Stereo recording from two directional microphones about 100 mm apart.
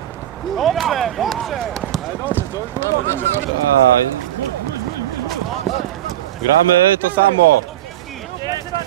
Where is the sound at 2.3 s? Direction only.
20° left (ahead or behind).